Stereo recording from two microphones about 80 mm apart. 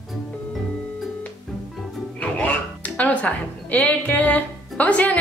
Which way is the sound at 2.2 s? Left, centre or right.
Centre.